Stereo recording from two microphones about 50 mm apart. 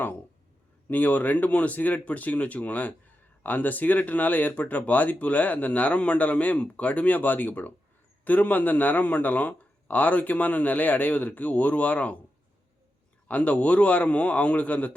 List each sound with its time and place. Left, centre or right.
0.9 s speech: left
13.2 s a man's voice: left